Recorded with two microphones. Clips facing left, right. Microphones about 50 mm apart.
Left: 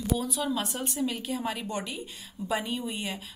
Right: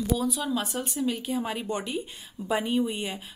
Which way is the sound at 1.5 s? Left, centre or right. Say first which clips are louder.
Right 3 dB; centre.